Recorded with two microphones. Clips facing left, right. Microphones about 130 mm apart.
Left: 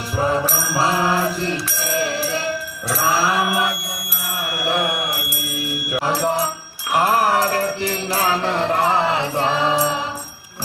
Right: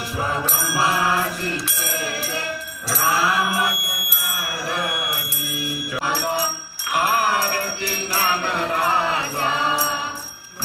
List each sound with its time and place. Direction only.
0.8 s mantra: 30° left (ahead or behind)
3.0 s a sound: 25° left (ahead or behind)
6.1 s music: 30° left (ahead or behind)